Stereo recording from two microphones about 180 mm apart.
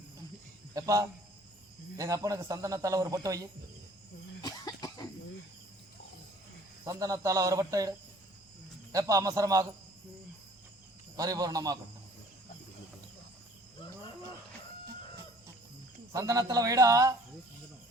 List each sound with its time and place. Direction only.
0.7 s a man's voice: 20° right (ahead or behind)
4.4 s cough: 20° left (ahead or behind)
6.8 s a man's voice: 20° right (ahead or behind)
11.2 s a man's voice: 20° right (ahead or behind)
16.1 s a man's voice: 20° right (ahead or behind)